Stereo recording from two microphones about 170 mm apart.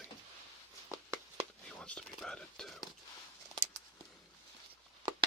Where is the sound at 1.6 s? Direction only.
5° left (ahead or behind).